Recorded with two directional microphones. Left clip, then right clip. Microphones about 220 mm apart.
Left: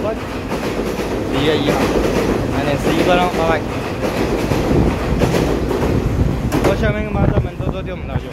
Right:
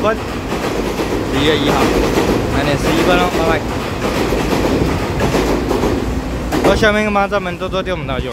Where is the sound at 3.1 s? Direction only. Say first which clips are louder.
Even; centre (ahead or behind).